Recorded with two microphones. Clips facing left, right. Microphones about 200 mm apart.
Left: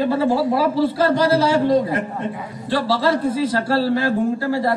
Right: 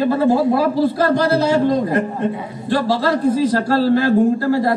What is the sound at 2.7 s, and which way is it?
A woman's voice, 45° right (ahead or behind).